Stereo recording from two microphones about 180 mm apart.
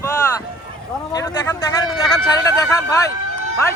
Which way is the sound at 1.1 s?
20° left (ahead or behind).